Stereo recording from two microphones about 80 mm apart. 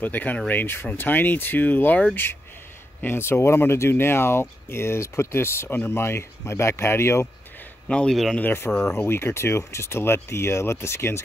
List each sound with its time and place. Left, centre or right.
0.0 s speech: left
7.9 s speech: centre
8.4 s speech: left